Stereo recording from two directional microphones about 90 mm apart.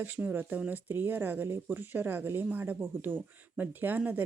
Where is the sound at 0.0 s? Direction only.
20° right (ahead or behind).